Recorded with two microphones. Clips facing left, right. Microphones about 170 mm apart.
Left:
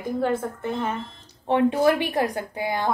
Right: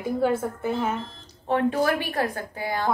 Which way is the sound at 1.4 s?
20° left (ahead or behind).